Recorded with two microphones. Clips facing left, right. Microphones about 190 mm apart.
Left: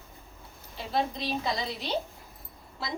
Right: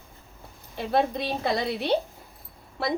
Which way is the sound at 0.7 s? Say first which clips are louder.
Right 6 dB; 60° right (ahead or behind).